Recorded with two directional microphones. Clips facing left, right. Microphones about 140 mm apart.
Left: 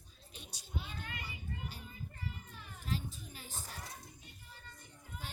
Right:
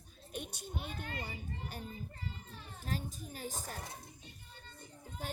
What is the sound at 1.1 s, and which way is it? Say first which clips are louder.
Speech: right 3 dB; 35° right (ahead or behind).